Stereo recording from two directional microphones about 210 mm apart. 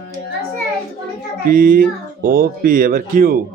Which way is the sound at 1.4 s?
40° right (ahead or behind).